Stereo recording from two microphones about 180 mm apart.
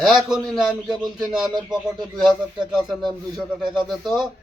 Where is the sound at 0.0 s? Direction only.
Centre (ahead or behind).